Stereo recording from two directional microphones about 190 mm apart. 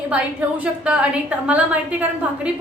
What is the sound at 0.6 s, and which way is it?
A woman's voice, 5° right (ahead or behind).